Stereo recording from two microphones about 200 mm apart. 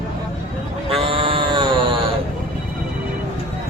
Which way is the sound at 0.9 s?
25° right (ahead or behind).